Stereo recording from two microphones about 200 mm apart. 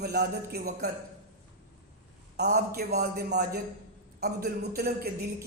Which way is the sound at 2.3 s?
50° right (ahead or behind).